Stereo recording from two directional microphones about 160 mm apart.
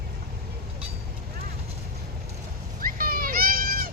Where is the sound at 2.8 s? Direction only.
65° right (ahead or behind).